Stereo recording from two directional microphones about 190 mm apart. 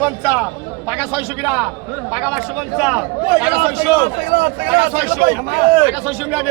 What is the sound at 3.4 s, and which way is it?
Speech, 5° right (ahead or behind).